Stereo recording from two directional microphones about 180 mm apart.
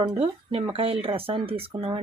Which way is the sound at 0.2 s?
30° right (ahead or behind).